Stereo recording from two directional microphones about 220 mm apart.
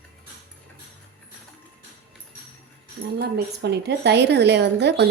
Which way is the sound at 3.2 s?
50° right (ahead or behind).